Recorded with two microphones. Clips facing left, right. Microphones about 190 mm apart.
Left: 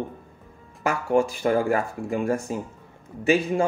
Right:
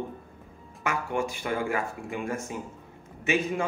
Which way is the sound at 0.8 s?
35° left (ahead or behind).